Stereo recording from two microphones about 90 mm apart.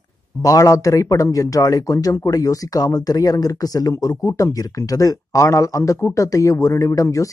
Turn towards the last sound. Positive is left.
turn(degrees=35)  # may be behind; listen again after turning